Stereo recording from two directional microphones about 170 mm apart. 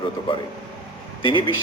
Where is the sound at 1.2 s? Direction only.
30° left (ahead or behind).